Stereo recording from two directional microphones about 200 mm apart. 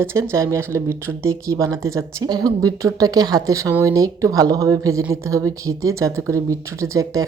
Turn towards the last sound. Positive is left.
turn(degrees=-15)  # may be behind; listen again after turning